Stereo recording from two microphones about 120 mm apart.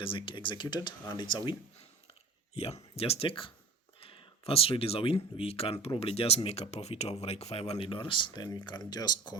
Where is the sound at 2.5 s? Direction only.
55° left (ahead or behind).